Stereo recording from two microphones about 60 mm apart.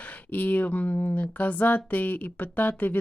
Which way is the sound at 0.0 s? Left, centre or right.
Left.